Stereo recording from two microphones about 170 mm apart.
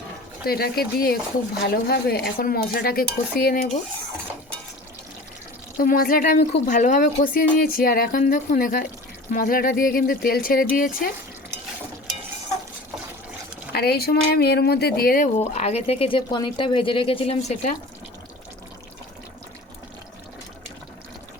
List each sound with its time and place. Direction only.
0.4 s speech: 65° left (ahead or behind)
5.7 s a woman's voice: 60° left (ahead or behind)
13.7 s speech: 70° left (ahead or behind)
15.5 s speech: 40° left (ahead or behind)